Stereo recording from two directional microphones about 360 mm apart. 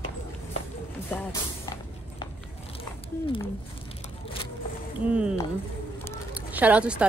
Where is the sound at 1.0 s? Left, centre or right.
Centre.